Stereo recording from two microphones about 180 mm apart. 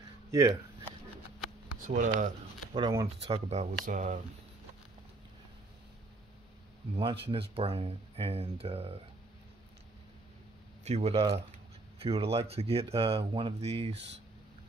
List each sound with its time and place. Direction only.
0.3 s a sound: 20° right (ahead or behind)
1.9 s speech: 45° right (ahead or behind)
2.7 s speech: 20° right (ahead or behind)
3.3 s speech: 35° right (ahead or behind)
7.0 s speech: 30° right (ahead or behind)
10.8 s speech: 35° right (ahead or behind)